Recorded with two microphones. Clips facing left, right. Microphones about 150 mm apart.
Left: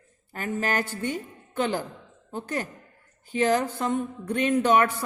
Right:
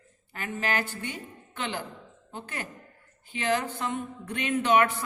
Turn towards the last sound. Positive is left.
turn(degrees=40)  # may be behind; listen again after turning